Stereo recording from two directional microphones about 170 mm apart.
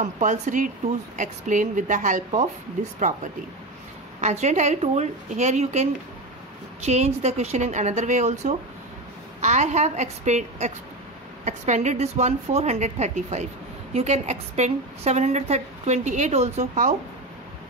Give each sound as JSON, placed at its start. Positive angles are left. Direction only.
{"t": 0.0, "sound": "a woman's voice", "side_deg": -45}